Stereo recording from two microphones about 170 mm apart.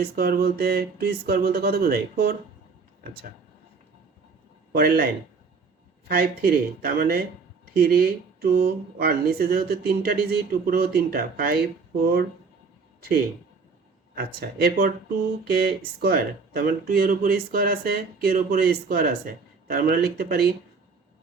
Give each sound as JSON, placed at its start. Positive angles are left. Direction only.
{"t": 0.0, "sound": "speech", "side_deg": -60}
{"t": 4.7, "sound": "speech", "side_deg": -60}
{"t": 6.1, "sound": "speech", "side_deg": -60}
{"t": 14.2, "sound": "speech", "side_deg": -65}